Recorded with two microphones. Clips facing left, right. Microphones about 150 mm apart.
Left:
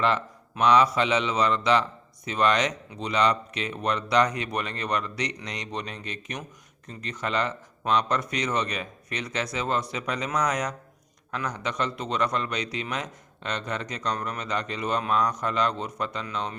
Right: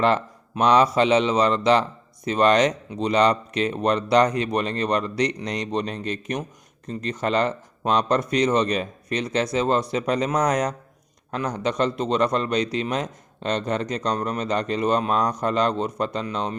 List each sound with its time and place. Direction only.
0.5 s a man's voice: 35° right (ahead or behind)